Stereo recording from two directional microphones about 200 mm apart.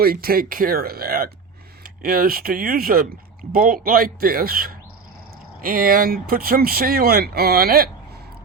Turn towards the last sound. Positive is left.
turn(degrees=-50)  # may be behind; listen again after turning